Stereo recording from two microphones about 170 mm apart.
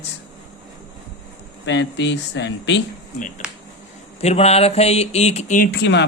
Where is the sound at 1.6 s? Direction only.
90° left.